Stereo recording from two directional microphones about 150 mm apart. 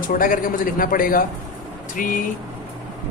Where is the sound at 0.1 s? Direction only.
70° left (ahead or behind).